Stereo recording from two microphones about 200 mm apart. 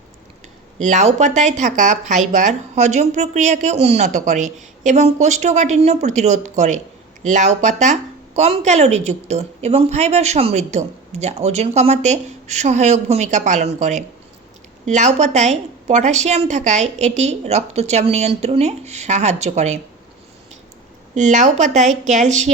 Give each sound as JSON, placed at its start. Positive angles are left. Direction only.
{"t": 0.8, "sound": "a woman's voice", "side_deg": -35}
{"t": 21.2, "sound": "a woman's voice", "side_deg": -35}